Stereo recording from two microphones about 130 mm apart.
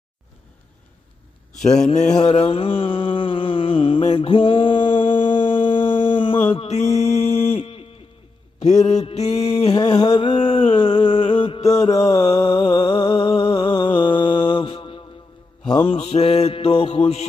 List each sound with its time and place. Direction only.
2.2 s mantra: 50° left (ahead or behind)
6.5 s mantra: 50° left (ahead or behind)
8.6 s mantra: 60° left (ahead or behind)
9.8 s a sound: 30° left (ahead or behind)
10.1 s mantra: 40° left (ahead or behind)
11.6 s mantra: 30° left (ahead or behind)
12.1 s music: 50° left (ahead or behind)